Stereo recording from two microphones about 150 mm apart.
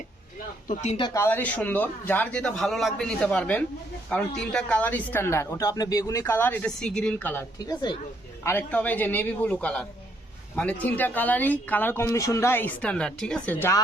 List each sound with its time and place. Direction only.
0.7 s speech: 50° left (ahead or behind)
1.1 s speech: 15° left (ahead or behind)
7.7 s speech: 30° left (ahead or behind)
8.4 s speech: 10° left (ahead or behind)